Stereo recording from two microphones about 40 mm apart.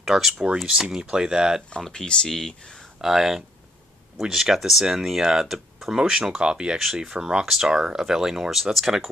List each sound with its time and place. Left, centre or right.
0.0 s speech: centre
1.9 s speech: left
2.2 s speech: centre
3.0 s speech: centre